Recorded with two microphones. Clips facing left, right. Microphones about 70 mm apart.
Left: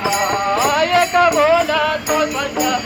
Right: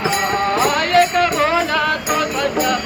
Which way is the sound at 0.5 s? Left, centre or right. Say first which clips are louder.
Even; centre.